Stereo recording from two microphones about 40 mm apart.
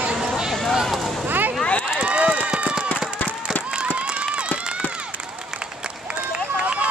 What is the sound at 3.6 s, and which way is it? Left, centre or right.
Run, right.